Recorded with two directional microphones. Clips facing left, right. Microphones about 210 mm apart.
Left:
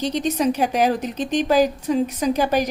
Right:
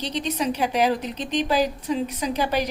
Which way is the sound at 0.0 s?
45° left (ahead or behind).